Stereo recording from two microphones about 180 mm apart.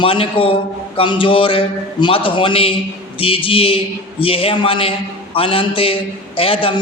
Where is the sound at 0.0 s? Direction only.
30° left (ahead or behind).